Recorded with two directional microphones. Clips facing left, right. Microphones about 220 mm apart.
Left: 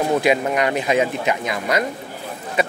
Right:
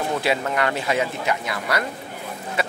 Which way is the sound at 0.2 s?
15° left (ahead or behind).